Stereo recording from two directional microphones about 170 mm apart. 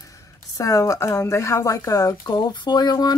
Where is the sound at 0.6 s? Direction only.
20° left (ahead or behind).